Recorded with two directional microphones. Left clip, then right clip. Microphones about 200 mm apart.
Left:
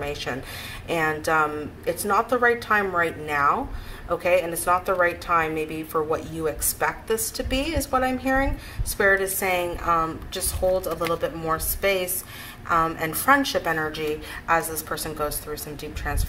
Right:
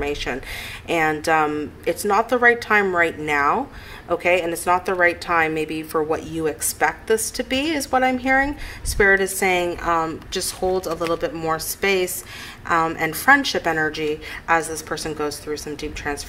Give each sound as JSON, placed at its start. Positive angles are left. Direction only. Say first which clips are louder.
{"t": 0.0, "sound": "a woman's voice", "louder": "right 4 dB", "side_deg": -45}